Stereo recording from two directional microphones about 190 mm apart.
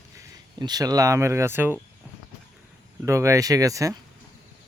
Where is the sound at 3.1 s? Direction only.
15° right (ahead or behind).